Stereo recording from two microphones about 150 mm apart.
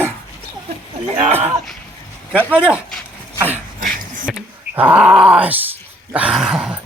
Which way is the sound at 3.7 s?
65° right (ahead or behind).